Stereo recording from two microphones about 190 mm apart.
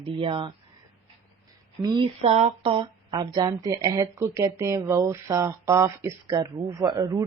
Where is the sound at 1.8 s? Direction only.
25° right (ahead or behind).